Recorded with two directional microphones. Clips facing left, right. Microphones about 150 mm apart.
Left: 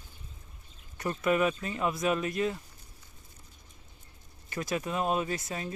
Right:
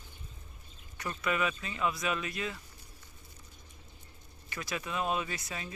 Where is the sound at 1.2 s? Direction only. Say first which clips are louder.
Left 6 dB; 45° left (ahead or behind).